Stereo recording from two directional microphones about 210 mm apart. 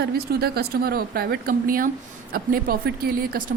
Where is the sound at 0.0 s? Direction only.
50° right (ahead or behind).